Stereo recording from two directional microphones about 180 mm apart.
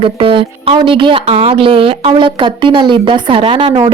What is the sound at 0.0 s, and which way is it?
Speech, 30° right (ahead or behind).